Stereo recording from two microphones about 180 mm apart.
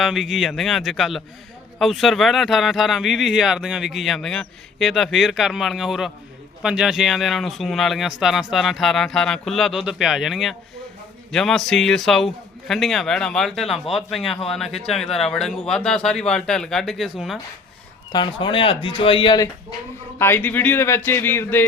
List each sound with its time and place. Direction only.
0.0 s speech: centre (ahead or behind)
18.1 s speech: 25° left (ahead or behind)
20.1 s speech: 10° left (ahead or behind)